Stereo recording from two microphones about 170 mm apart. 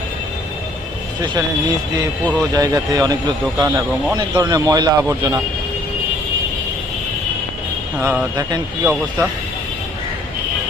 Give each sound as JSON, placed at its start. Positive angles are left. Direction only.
{"t": 1.2, "sound": "speech", "side_deg": -25}
{"t": 2.5, "sound": "speech", "side_deg": -20}
{"t": 7.9, "sound": "speech", "side_deg": -5}
{"t": 8.4, "sound": "speech", "side_deg": -25}
{"t": 8.8, "sound": "speech", "side_deg": -10}